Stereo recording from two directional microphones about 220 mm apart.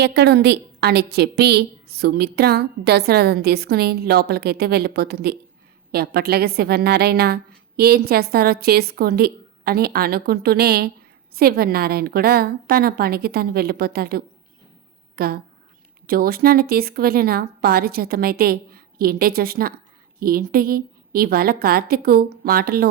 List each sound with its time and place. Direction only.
0.0 s a woman's voice: 50° right (ahead or behind)